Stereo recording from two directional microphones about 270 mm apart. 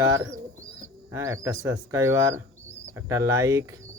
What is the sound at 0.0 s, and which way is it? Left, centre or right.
Speech, centre.